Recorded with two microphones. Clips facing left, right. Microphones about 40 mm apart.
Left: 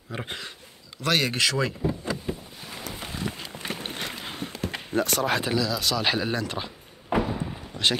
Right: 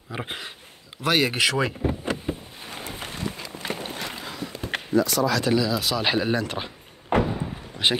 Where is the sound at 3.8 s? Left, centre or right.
Left.